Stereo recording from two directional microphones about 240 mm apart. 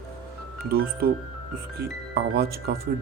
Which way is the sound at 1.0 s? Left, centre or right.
Right.